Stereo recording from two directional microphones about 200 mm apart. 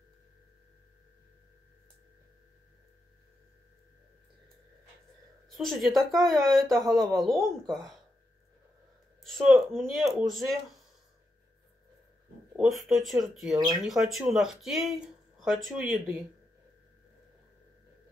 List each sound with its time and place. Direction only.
5.6 s speech: centre (ahead or behind)
9.2 s speech: centre (ahead or behind)
12.5 s speech: centre (ahead or behind)